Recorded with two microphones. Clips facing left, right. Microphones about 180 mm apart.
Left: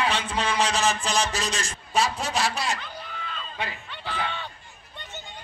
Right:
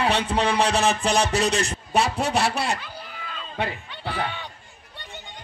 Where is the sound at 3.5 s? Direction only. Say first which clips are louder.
Right 7 dB; 55° right (ahead or behind).